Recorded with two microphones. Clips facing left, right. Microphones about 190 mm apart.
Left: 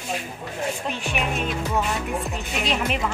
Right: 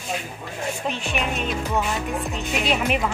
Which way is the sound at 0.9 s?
10° left (ahead or behind).